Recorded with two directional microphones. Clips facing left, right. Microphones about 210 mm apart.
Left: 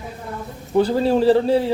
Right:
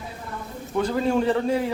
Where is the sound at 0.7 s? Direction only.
30° left (ahead or behind).